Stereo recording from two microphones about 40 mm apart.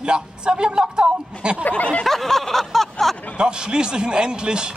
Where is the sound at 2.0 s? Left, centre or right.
Centre.